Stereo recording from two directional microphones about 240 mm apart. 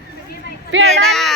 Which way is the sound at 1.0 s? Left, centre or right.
Centre.